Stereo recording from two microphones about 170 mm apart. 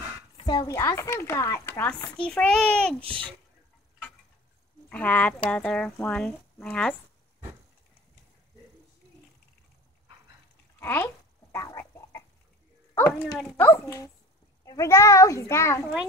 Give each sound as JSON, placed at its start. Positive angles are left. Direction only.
{"t": 0.4, "sound": "a woman's voice", "side_deg": 25}
{"t": 4.8, "sound": "a woman's voice", "side_deg": 10}
{"t": 10.8, "sound": "speech", "side_deg": 15}
{"t": 11.5, "sound": "chicken", "side_deg": 15}
{"t": 12.9, "sound": "a woman's voice", "side_deg": 15}